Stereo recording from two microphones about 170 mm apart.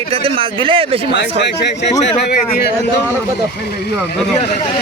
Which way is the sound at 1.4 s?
90° left.